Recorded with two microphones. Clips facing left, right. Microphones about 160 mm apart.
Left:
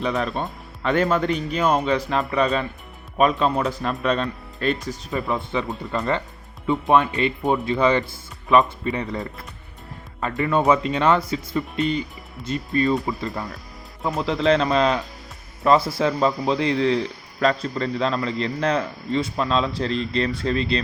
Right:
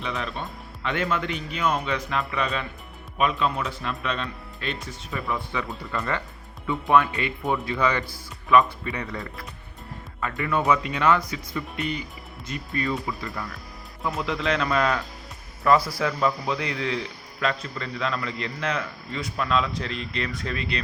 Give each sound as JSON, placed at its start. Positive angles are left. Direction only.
{"t": 0.0, "sound": "a man's voice", "side_deg": 40}
{"t": 5.9, "sound": "speech", "side_deg": 25}
{"t": 10.3, "sound": "a man's voice", "side_deg": 25}